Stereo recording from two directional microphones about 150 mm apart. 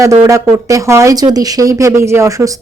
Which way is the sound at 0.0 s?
20° right (ahead or behind).